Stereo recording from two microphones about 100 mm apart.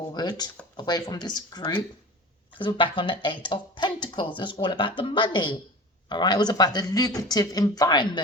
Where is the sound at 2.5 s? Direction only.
60° left (ahead or behind).